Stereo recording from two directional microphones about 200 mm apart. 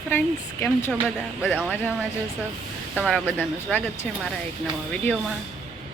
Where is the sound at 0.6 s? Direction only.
10° left (ahead or behind).